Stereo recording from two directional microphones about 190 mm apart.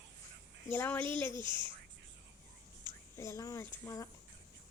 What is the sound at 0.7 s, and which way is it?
Speech, 10° left (ahead or behind).